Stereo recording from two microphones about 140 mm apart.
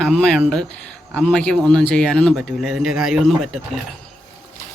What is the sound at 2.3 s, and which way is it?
Speech, 5° right (ahead or behind).